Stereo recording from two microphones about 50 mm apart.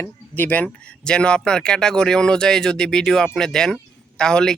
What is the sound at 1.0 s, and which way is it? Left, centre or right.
Speech, centre.